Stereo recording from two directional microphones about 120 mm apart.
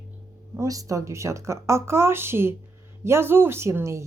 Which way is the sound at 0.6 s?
30° right (ahead or behind).